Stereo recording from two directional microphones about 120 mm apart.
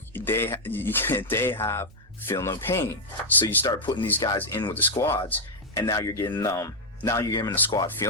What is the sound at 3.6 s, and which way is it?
Speech, 35° left (ahead or behind).